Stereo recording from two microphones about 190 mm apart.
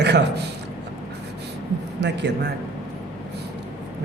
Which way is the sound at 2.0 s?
65° right (ahead or behind).